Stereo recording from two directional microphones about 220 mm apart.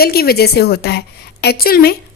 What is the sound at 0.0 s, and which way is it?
A woman's voice, 45° left (ahead or behind).